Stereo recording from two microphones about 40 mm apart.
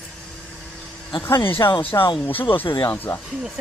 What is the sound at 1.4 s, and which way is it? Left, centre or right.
Speech, left.